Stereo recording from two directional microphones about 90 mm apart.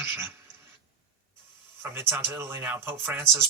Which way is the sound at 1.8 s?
25° right (ahead or behind).